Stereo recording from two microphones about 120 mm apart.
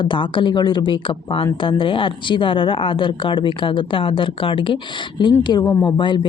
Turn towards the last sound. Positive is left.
turn(degrees=40)  # may be behind; listen again after turning